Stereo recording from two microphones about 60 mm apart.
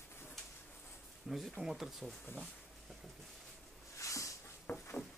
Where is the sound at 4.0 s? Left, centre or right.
Left.